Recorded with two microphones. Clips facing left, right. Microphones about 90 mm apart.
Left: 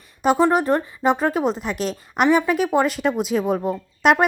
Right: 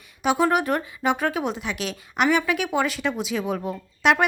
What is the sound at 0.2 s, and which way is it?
Speech, 35° left (ahead or behind).